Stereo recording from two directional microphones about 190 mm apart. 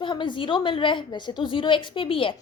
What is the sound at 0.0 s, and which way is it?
A woman's voice, 25° left (ahead or behind).